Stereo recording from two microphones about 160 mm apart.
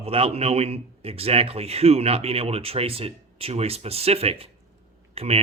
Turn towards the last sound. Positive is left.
turn(degrees=-40)  # may be behind; listen again after turning